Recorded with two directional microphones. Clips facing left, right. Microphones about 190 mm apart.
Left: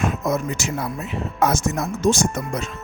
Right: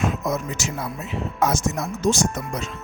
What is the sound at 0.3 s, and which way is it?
Speech, 55° left (ahead or behind).